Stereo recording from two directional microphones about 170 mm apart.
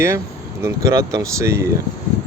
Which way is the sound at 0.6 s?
20° right (ahead or behind).